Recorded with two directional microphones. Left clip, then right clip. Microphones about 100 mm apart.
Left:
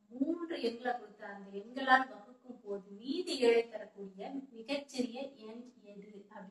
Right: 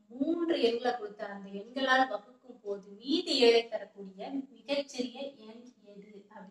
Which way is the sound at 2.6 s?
25° right (ahead or behind).